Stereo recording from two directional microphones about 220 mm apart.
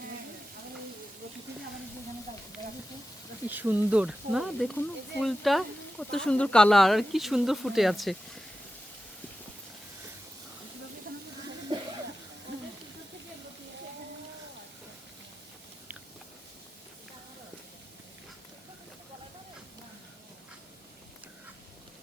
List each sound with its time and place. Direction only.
3.4 s speech: 10° right (ahead or behind)
11.7 s a sound: 20° right (ahead or behind)
12.5 s hiss: 50° right (ahead or behind)